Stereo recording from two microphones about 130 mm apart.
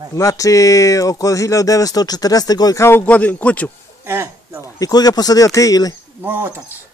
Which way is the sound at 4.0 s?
20° right (ahead or behind).